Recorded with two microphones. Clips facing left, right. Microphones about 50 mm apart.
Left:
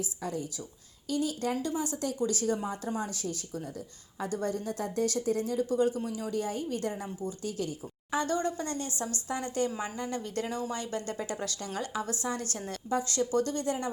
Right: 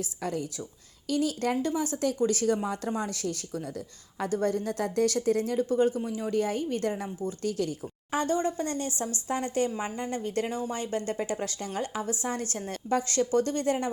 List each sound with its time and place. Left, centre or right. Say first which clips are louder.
0.2 s speech: right 6 dB; right
4.3 s speech: right 5 dB; right
6.3 s speech: right 6 dB; right
7.4 s speech: right 6 dB; right
8.1 s speech: right 2 dB; right
9.6 s a woman's voice: right 2 dB; right
10.0 s speech: right 5 dB; right
12.9 s speech: right 3 dB; right